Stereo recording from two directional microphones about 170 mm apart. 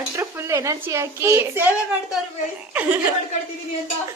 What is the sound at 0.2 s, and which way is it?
Speech, 15° right (ahead or behind).